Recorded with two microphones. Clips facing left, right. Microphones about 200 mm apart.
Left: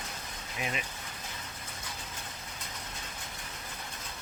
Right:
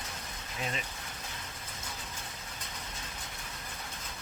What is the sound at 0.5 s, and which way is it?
Speech, 15° left (ahead or behind).